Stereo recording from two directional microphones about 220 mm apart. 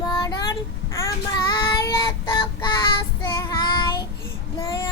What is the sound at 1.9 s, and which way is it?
Child singing, 20° left (ahead or behind).